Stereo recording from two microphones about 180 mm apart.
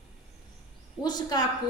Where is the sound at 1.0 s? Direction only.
20° left (ahead or behind).